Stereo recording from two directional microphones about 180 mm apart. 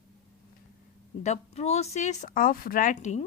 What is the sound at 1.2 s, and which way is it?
Speech, 35° left (ahead or behind).